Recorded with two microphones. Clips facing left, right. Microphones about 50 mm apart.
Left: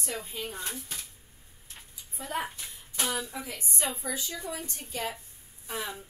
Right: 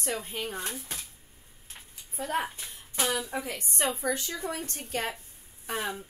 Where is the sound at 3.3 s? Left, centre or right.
Right.